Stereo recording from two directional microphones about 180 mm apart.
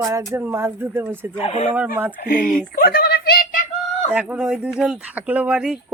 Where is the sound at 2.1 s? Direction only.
50° left (ahead or behind).